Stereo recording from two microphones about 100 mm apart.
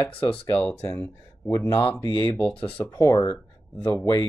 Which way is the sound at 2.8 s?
35° left (ahead or behind).